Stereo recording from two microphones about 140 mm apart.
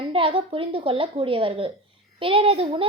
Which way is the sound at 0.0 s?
40° right (ahead or behind).